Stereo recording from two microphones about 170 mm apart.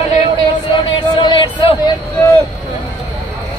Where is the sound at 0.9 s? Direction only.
25° left (ahead or behind).